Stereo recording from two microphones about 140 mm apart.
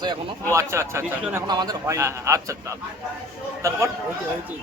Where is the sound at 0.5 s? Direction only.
20° right (ahead or behind).